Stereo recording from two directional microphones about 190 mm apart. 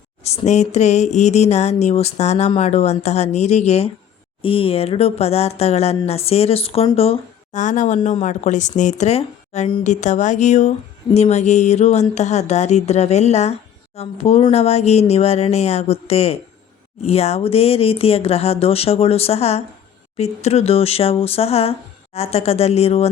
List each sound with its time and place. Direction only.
0.3 s speech: 35° left (ahead or behind)